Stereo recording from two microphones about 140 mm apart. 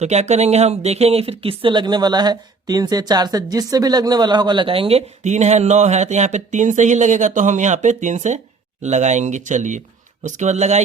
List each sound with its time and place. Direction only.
0.0 s speech: 55° right (ahead or behind)